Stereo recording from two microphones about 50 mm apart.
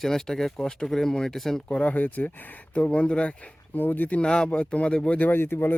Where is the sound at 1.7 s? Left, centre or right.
Left.